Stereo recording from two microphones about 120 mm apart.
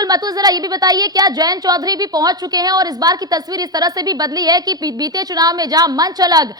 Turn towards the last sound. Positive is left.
turn(degrees=-30)  # may be behind; listen again after turning